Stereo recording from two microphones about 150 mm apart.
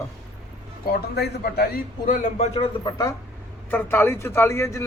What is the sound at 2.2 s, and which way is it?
Speech, 50° left (ahead or behind).